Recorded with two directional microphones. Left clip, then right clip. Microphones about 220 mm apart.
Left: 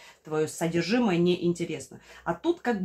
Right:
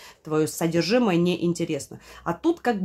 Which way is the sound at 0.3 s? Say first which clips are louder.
Right 4 dB; 50° right (ahead or behind).